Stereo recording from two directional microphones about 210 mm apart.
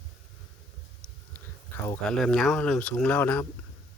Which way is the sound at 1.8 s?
5° left (ahead or behind).